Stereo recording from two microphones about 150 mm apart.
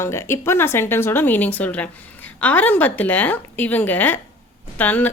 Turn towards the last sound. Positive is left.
turn(degrees=10)  # may be behind; listen again after turning